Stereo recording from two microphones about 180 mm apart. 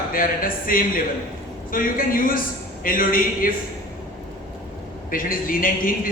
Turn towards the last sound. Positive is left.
turn(degrees=50)  # may be behind; listen again after turning